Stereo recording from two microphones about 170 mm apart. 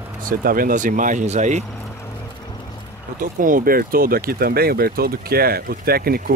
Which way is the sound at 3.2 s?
55° right (ahead or behind).